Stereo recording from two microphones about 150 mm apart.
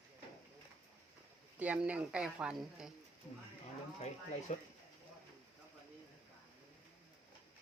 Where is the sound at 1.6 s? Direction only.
10° right (ahead or behind).